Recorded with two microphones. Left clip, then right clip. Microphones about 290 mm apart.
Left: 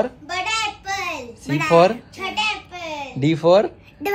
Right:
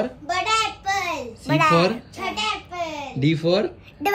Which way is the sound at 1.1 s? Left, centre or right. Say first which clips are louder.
Right 3 dB; centre.